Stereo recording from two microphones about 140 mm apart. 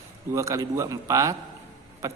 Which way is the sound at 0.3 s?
20° right (ahead or behind).